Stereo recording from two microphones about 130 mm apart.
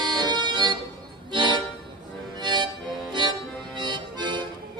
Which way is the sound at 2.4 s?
35° right (ahead or behind).